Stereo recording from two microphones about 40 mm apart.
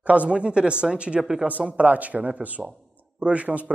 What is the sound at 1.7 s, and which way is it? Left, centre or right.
Speech, right.